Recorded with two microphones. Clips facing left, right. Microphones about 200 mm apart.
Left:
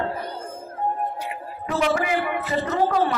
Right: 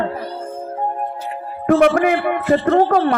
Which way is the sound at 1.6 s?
55° right (ahead or behind).